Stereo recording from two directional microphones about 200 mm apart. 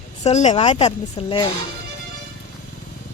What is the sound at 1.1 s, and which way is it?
Speech, 20° left (ahead or behind).